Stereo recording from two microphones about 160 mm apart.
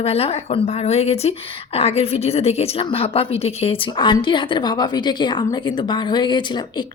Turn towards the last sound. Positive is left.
turn(degrees=30)  # may be behind; listen again after turning